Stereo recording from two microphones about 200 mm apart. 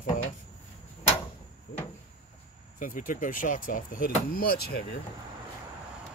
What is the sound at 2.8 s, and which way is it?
Speech, 40° left (ahead or behind).